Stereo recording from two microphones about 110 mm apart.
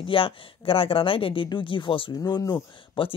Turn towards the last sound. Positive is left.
turn(degrees=50)  # may be behind; listen again after turning